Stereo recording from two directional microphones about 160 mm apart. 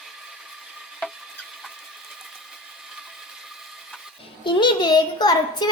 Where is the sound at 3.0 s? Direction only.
Centre (ahead or behind).